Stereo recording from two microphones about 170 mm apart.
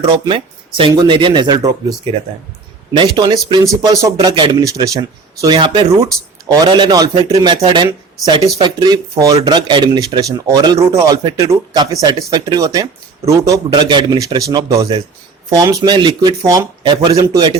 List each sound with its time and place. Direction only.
0.1 s speech: 30° right (ahead or behind)